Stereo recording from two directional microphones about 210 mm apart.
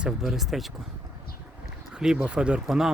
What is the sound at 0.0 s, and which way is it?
Speech, centre (ahead or behind).